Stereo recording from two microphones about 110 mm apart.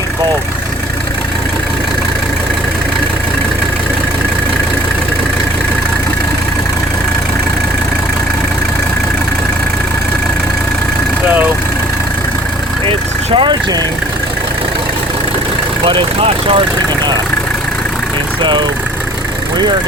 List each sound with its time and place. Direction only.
12.8 s vehicle: 50° right (ahead or behind)
15.8 s speech: 50° right (ahead or behind)